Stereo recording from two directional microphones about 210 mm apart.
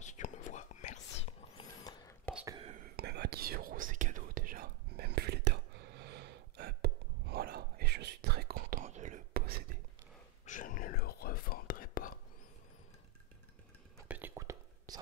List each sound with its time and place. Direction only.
0.0 s whispering: 35° left (ahead or behind)
1.6 s a sound: 20° left (ahead or behind)
2.3 s whispering: 15° right (ahead or behind)
3.0 s whispering: 50° right (ahead or behind)
10.4 s whispering: 40° left (ahead or behind)
14.0 s whispering: 10° right (ahead or behind)